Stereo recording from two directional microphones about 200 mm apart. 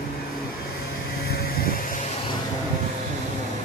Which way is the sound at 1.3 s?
50° left (ahead or behind).